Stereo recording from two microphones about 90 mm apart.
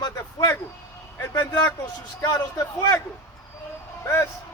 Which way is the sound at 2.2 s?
45° left (ahead or behind).